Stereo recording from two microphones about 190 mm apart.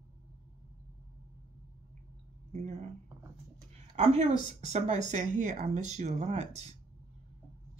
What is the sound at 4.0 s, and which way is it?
Speech, 35° right (ahead or behind).